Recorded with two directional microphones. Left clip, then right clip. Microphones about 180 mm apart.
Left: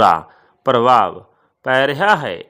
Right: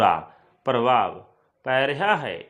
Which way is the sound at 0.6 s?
35° left (ahead or behind).